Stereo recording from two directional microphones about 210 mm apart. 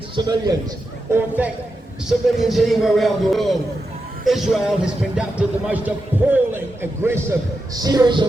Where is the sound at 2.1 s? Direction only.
Centre (ahead or behind).